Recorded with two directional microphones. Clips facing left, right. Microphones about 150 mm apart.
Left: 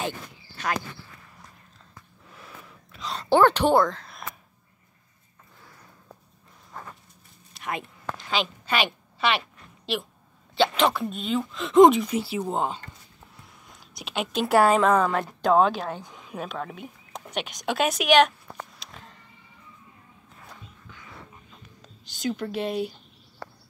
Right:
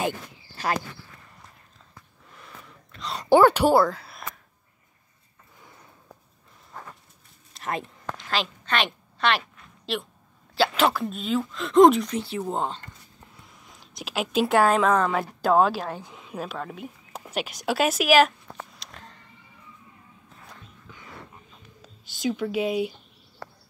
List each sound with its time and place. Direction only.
0.6 s speech: 30° right (ahead or behind)
2.3 s a sound: centre (ahead or behind)
3.2 s speech: 10° right (ahead or behind)
8.2 s a sound: centre (ahead or behind)
9.9 s speech: centre (ahead or behind)
21.8 s speech: 5° right (ahead or behind)